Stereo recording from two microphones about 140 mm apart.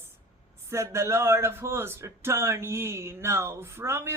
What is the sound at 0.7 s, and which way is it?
A man's voice, 20° right (ahead or behind).